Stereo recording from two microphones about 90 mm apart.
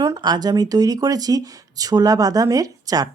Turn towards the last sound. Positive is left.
turn(degrees=-45)  # may be behind; listen again after turning